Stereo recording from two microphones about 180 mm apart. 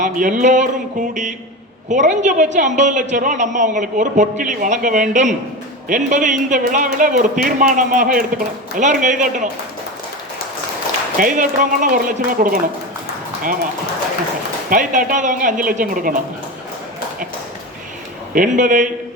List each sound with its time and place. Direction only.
0.0 s a woman's voice: 45° right (ahead or behind)
11.2 s a woman's voice: 45° right (ahead or behind)
14.7 s a woman's voice: 45° right (ahead or behind)
18.3 s a woman's voice: 45° right (ahead or behind)